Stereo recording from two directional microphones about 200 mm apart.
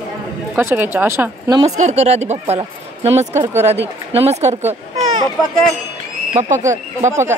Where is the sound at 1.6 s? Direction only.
35° right (ahead or behind).